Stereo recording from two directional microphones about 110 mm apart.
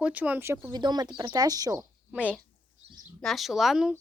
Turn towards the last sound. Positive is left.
turn(degrees=-5)  # may be behind; listen again after turning